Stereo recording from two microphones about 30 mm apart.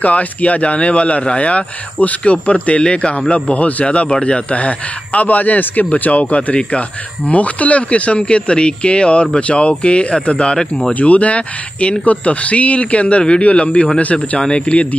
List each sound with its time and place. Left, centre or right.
0.0 s speech: left
2.0 s speech: left
2.3 s speech: left
4.6 s speech: left
10.5 s speech: left
10.9 s speech: left